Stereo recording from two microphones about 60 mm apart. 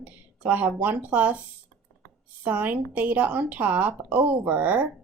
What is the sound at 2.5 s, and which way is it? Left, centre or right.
Speech, right.